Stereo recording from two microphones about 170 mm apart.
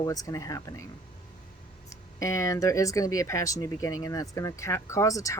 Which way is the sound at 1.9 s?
20° left (ahead or behind).